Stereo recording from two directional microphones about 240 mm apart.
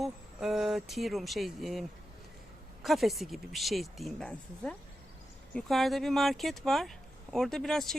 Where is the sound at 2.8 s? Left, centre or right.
Centre.